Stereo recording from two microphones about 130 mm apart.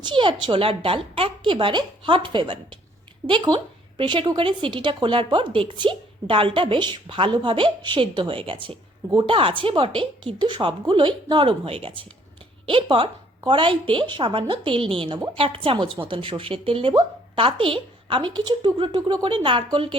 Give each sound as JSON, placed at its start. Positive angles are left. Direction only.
{"t": 0.0, "sound": "a woman's voice", "side_deg": -40}